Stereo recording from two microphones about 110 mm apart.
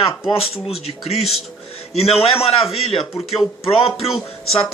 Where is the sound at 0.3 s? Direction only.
60° left (ahead or behind).